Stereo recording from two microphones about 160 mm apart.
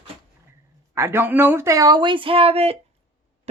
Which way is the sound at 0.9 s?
15° right (ahead or behind).